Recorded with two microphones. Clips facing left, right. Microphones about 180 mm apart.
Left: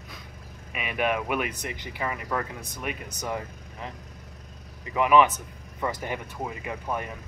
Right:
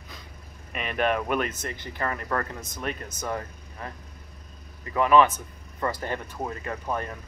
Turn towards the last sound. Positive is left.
turn(degrees=10)  # may be behind; listen again after turning